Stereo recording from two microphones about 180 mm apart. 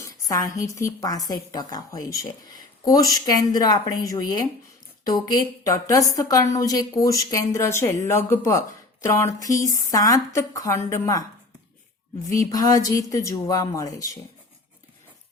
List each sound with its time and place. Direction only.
0.3 s a woman's voice: 20° left (ahead or behind)
12.3 s a woman's voice: 20° left (ahead or behind)